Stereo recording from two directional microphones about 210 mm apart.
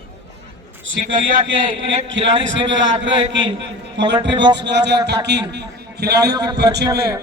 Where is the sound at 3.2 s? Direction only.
25° right (ahead or behind).